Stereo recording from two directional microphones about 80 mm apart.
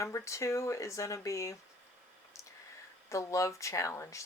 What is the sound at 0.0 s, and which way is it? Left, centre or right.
Speech, left.